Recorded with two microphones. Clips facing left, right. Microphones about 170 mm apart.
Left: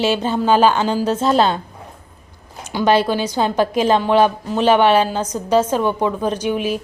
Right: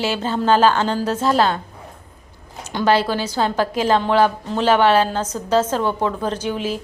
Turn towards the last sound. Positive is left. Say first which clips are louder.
# left 3 dB
turn(degrees=15)  # may be behind; listen again after turning